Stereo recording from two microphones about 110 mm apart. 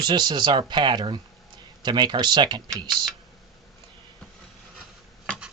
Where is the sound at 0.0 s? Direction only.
40° right (ahead or behind).